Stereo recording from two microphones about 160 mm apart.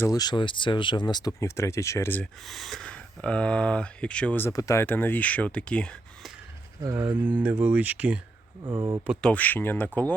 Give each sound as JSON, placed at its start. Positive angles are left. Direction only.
{"t": 0.0, "sound": "speech", "side_deg": 25}
{"t": 2.5, "sound": "speech", "side_deg": 0}
{"t": 6.8, "sound": "speech", "side_deg": -20}
{"t": 8.6, "sound": "speech", "side_deg": -25}
{"t": 9.2, "sound": "speech", "side_deg": 10}